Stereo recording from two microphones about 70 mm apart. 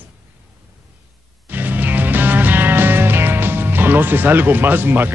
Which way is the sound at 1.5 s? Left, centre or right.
Right.